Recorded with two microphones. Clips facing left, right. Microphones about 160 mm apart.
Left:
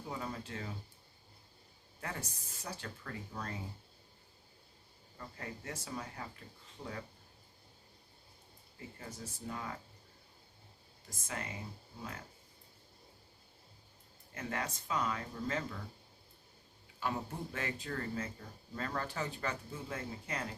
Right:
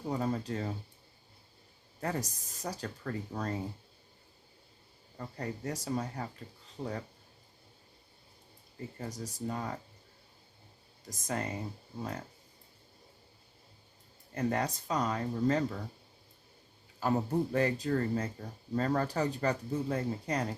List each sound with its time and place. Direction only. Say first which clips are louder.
0.1 s speech: right 9 dB; 40° right (ahead or behind)
2.0 s speech: right 8 dB; 40° right (ahead or behind)
5.1 s speech: right 7 dB; 35° right (ahead or behind)
9.0 s speech: right 8 dB; 40° right (ahead or behind)
11.1 s speech: right 8 dB; 40° right (ahead or behind)
14.3 s speech: right 8 dB; 35° right (ahead or behind)
17.0 s speech: right 9 dB; 40° right (ahead or behind)